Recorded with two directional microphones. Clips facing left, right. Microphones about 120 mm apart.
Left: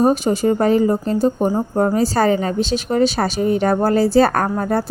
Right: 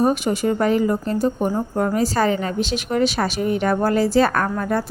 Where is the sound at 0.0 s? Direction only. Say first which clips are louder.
Left 3 dB; 30° left (ahead or behind).